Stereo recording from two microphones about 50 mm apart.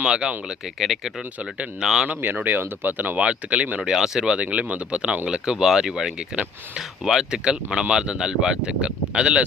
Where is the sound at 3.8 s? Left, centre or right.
Centre.